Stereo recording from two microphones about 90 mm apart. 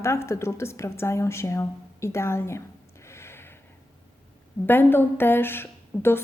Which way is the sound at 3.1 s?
30° left (ahead or behind).